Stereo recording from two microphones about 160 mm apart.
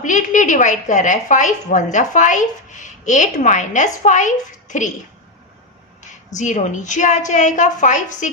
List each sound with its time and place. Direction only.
0.0 s a woman's voice: 50° left (ahead or behind)
6.0 s a woman's voice: 50° left (ahead or behind)